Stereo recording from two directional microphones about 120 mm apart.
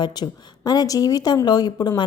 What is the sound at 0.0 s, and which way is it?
A woman's voice, 35° left (ahead or behind).